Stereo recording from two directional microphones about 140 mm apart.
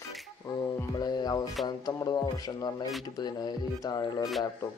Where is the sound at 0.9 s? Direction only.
30° left (ahead or behind).